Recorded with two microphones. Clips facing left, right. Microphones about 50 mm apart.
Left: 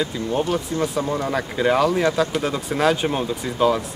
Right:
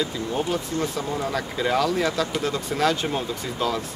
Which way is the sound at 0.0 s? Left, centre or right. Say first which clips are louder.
Left 3 dB; centre.